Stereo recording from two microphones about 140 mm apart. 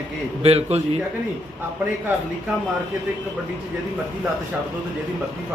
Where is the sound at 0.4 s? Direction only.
45° right (ahead or behind).